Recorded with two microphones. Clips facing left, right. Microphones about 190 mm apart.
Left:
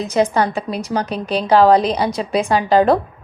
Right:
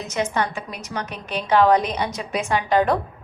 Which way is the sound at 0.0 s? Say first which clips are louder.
Left 7 dB; 35° left (ahead or behind).